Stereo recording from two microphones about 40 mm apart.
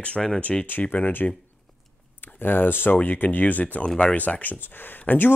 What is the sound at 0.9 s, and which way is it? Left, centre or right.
Speech, left.